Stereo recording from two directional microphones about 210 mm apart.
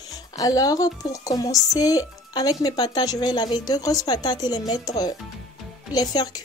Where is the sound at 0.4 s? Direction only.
15° left (ahead or behind).